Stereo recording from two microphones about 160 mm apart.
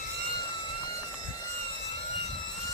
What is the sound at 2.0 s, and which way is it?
Vehicle, 40° left (ahead or behind).